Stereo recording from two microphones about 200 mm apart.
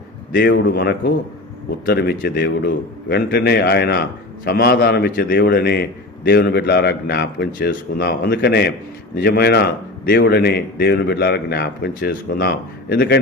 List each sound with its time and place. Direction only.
0.3 s a man's voice: 55° left (ahead or behind)